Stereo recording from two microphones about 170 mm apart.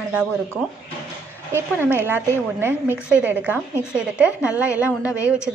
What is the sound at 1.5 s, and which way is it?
A woman's voice, 15° right (ahead or behind).